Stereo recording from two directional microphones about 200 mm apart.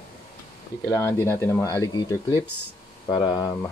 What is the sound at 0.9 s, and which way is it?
Speech, 15° left (ahead or behind).